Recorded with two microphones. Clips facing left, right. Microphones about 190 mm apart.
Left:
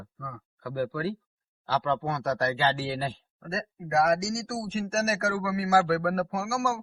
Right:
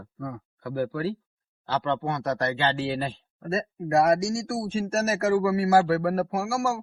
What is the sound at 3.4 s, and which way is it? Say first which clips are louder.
Speech: right 6 dB; 30° right (ahead or behind).